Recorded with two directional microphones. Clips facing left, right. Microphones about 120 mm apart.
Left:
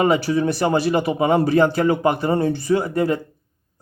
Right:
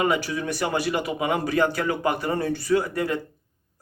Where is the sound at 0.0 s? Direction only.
30° left (ahead or behind).